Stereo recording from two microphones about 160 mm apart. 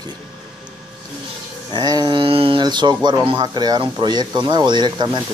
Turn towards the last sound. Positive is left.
turn(degrees=-30)  # may be behind; listen again after turning